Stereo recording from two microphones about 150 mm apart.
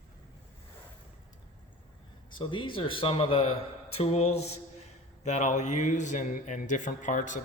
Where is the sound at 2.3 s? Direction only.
35° left (ahead or behind); by 7.4 s 55° left (ahead or behind).